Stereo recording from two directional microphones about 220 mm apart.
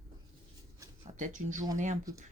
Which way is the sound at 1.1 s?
35° right (ahead or behind).